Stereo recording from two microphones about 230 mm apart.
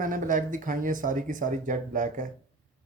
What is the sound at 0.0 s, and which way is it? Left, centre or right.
Speech, right.